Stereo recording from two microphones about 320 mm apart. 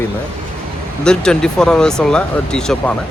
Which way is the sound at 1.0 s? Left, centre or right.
Centre.